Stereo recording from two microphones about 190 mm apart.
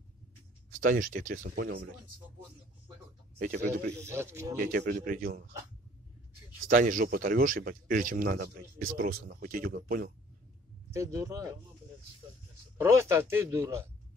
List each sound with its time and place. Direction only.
0.7 s a man's voice: 45° right (ahead or behind)
3.3 s a man's voice: 50° right (ahead or behind)
3.9 s speech: 15° right (ahead or behind)
4.6 s a man's voice: 50° right (ahead or behind)
6.7 s a man's voice: 45° right (ahead or behind)
10.9 s speech: 15° right (ahead or behind)
12.8 s speech: 15° right (ahead or behind)